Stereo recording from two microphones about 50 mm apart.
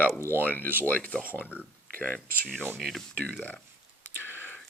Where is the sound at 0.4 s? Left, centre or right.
Left.